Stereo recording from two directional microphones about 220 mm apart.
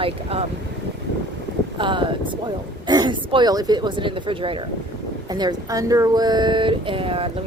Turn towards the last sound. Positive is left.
turn(degrees=-25)  # may be behind; listen again after turning